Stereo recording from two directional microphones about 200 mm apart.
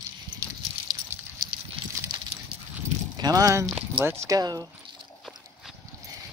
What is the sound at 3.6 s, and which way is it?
Speech, 5° right (ahead or behind).